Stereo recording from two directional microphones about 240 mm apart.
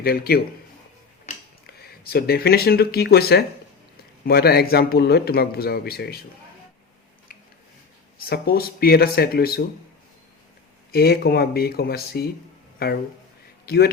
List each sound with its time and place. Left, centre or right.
0.0 s a man's voice: left
8.3 s a man's voice: left
10.9 s a man's voice: left